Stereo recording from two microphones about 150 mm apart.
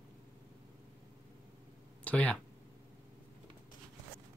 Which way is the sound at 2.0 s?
10° left (ahead or behind).